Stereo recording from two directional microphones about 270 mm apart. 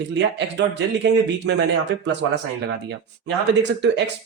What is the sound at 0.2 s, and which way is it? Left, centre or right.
Speech, right.